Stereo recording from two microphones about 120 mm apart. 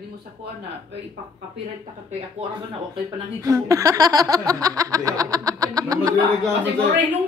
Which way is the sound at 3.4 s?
25° right (ahead or behind).